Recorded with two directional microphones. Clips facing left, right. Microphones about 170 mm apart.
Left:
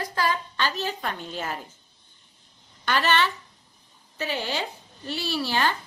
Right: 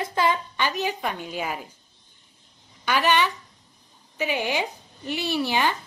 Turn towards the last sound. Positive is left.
turn(degrees=-15)  # may be behind; listen again after turning